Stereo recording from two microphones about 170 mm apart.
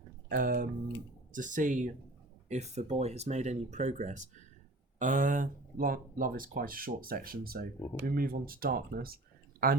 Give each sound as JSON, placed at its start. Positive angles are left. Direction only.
{"t": 0.3, "sound": "speech", "side_deg": -55}